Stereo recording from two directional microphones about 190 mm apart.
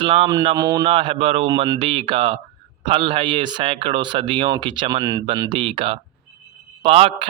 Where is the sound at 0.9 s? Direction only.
30° right (ahead or behind).